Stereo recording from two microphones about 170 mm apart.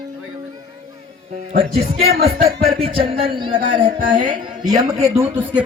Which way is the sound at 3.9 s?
50° right (ahead or behind).